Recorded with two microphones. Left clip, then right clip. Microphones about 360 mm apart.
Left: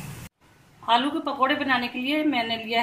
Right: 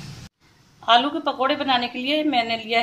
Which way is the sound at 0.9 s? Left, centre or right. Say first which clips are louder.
Right 4 dB; centre.